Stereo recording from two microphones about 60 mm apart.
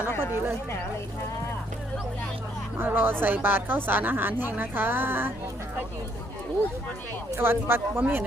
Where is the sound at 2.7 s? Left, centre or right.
Right.